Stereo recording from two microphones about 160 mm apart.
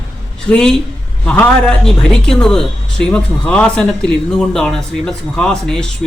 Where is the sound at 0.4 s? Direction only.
5° left (ahead or behind).